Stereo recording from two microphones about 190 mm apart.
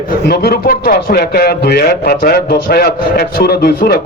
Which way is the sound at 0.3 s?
55° left (ahead or behind).